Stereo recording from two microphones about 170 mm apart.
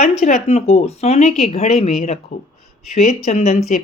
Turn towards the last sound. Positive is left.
turn(degrees=40)  # may be behind; listen again after turning